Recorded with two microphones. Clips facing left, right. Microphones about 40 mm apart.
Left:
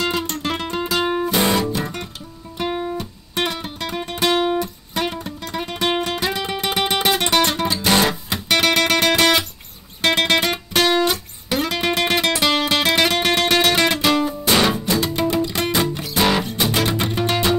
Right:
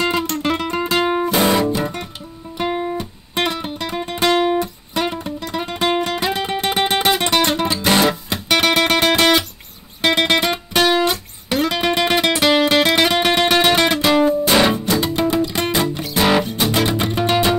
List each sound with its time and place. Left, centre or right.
0.7 s music: right
0.9 s guitar: centre
2.9 s music: centre
4.3 s guitar: centre
5.5 s music: centre
8.1 s guitar: centre
12.0 s music: centre